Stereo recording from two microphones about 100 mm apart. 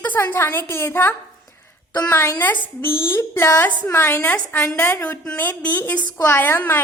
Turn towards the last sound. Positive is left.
turn(degrees=20)  # may be behind; listen again after turning